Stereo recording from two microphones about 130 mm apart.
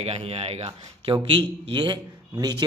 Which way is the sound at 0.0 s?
55° right (ahead or behind).